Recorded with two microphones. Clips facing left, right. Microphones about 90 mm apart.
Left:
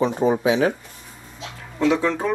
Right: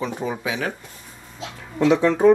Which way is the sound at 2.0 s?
15° right (ahead or behind).